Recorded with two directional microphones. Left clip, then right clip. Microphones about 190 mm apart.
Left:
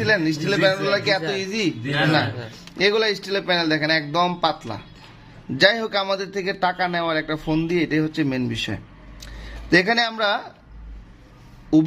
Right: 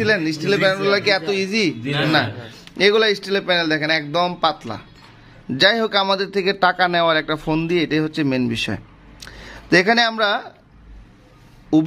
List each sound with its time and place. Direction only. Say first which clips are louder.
0.0 s a man's voice: right 1 dB; 15° right (ahead or behind)
1.9 s a man's voice: even; 45° right (ahead or behind)
2.1 s a man's voice: right 3 dB; 20° right (ahead or behind)
11.7 s a man's voice: right 1 dB; 20° right (ahead or behind)